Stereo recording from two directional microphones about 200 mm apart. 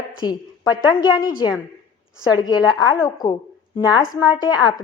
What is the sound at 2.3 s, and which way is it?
A woman's voice, 20° left (ahead or behind).